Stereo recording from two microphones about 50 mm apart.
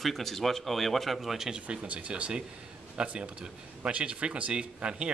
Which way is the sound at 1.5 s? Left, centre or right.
Right.